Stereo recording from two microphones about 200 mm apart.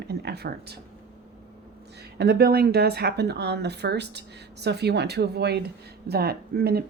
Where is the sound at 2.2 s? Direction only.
50° right (ahead or behind).